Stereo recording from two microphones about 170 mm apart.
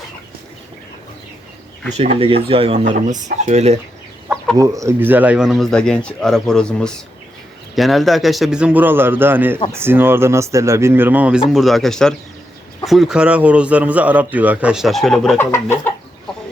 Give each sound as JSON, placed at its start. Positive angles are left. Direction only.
{"t": 1.9, "sound": "speech", "side_deg": -40}
{"t": 4.5, "sound": "a man's voice", "side_deg": -20}
{"t": 11.5, "sound": "a man's voice", "side_deg": 0}